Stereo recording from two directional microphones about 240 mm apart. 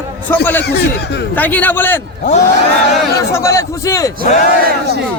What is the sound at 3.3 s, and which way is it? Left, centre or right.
Speech, centre.